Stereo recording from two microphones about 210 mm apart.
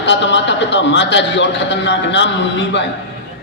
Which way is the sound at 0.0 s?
60° left (ahead or behind).